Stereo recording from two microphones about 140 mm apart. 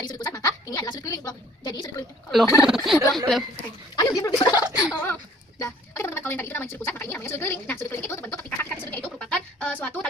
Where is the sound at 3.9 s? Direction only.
25° left (ahead or behind).